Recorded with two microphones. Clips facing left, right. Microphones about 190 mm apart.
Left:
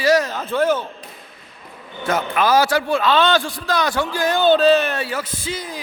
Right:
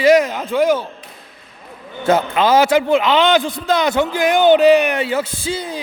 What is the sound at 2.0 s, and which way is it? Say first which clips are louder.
A man's voice: right 4 dB; 25° right (ahead or behind).